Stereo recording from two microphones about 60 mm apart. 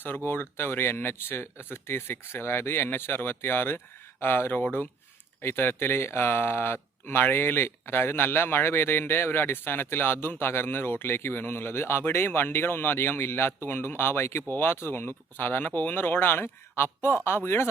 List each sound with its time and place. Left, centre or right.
0.3 s speech: left